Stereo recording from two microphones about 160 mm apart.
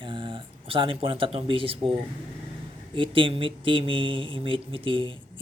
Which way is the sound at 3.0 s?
35° right (ahead or behind).